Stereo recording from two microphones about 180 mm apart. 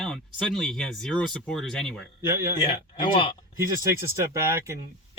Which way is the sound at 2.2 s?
15° right (ahead or behind).